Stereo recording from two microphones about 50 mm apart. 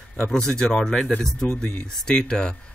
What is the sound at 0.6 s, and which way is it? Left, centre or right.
Speech, centre.